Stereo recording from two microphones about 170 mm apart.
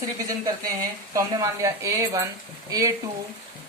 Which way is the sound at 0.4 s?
20° right (ahead or behind).